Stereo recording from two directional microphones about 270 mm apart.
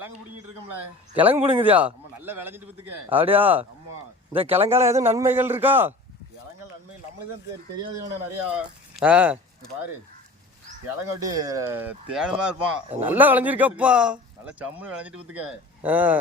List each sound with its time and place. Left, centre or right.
1.1 s a man's voice: centre
4.3 s speech: right
4.7 s a man's voice: centre
8.5 s a man's voice: centre
11.3 s a man's voice: centre